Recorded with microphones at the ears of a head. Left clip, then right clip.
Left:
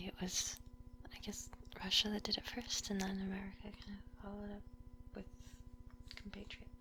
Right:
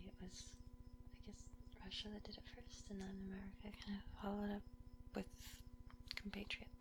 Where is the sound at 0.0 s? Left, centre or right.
Left.